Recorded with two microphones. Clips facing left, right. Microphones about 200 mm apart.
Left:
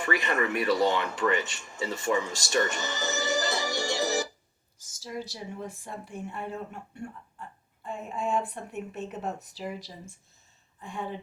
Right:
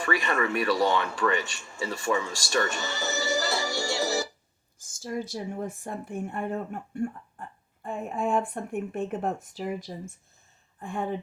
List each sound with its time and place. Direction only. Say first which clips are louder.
0.0 s speech: right 1 dB; 20° left (ahead or behind)
4.8 s speech: right 4 dB; 50° right (ahead or behind)